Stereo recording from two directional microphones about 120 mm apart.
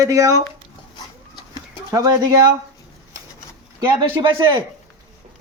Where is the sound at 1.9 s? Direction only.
30° right (ahead or behind).